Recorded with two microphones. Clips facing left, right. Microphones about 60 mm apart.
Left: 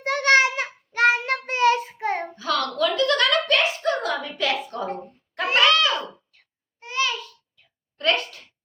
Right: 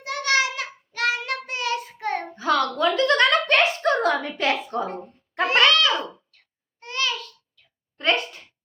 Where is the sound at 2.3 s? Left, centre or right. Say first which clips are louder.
Right 3 dB; right.